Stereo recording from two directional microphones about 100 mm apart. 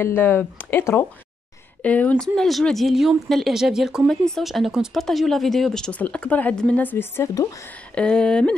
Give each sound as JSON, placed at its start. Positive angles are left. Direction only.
{"t": 0.0, "sound": "speech", "side_deg": 20}
{"t": 2.2, "sound": "speech", "side_deg": 5}
{"t": 7.9, "sound": "speech", "side_deg": 10}